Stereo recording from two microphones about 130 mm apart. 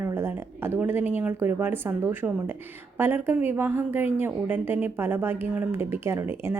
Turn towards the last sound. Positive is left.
turn(degrees=-20)  # may be behind; listen again after turning